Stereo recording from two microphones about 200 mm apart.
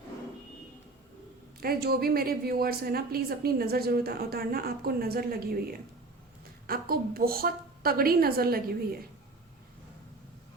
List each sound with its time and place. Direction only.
1.6 s a woman's voice: 50° right (ahead or behind)
6.7 s a woman's voice: 50° right (ahead or behind)